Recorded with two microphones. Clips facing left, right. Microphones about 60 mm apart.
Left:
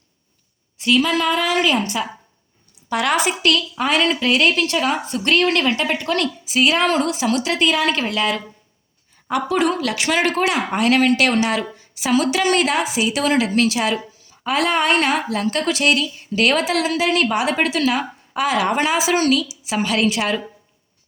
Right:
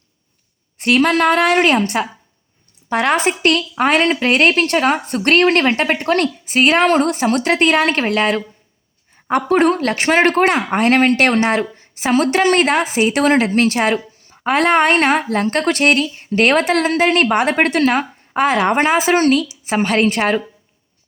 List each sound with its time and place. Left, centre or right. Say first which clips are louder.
0.8 s a woman's voice: right 4 dB; right
2.9 s a woman's voice: right 3 dB; right
9.5 s a woman's voice: right 6 dB; right